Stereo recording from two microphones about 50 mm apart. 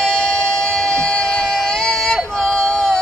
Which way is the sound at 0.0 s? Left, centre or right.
Centre.